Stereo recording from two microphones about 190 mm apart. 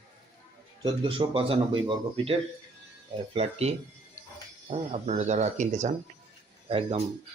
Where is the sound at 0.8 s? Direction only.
25° right (ahead or behind).